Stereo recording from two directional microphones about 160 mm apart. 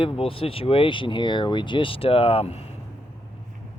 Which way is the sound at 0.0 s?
35° left (ahead or behind).